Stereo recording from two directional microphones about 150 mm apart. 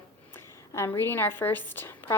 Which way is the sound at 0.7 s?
15° left (ahead or behind).